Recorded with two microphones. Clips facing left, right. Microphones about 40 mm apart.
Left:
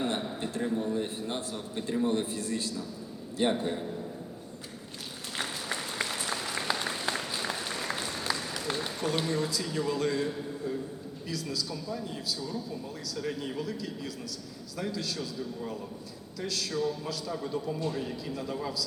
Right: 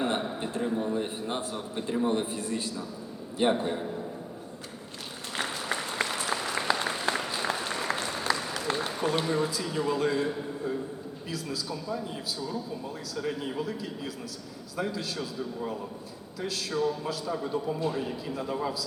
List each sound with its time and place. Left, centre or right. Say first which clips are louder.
0.0 s a man's voice: right 2 dB; centre
5.4 s applause: right 3 dB; centre
11.3 s a man's voice: even; centre